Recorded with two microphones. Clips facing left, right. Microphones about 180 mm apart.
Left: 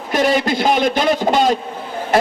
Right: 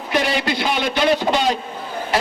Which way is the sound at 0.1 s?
45° left (ahead or behind).